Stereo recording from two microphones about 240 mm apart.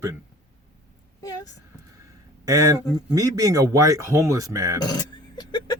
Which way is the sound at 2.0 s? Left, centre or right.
Centre.